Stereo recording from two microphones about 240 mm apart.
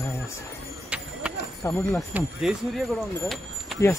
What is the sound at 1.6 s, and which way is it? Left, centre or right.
Speech, centre.